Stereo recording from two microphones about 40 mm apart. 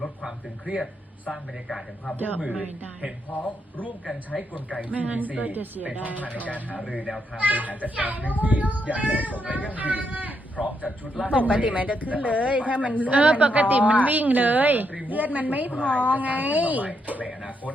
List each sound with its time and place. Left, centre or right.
1.3 s speech: centre
2.4 s a woman's voice: right
4.8 s a woman's voice: right
6.3 s speech: left
7.3 s a child's voice: right
15.7 s speech: left
16.0 s a child's voice: right